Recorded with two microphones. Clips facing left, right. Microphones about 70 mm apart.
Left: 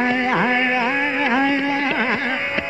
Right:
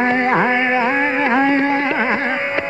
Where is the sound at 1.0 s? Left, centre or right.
Right.